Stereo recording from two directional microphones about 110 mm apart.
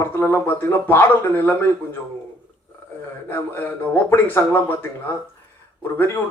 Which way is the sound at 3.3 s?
20° left (ahead or behind).